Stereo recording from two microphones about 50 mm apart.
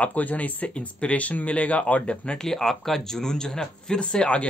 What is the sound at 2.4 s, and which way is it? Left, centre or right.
Speech, centre.